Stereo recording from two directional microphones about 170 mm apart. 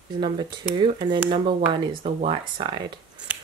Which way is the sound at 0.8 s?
25° right (ahead or behind).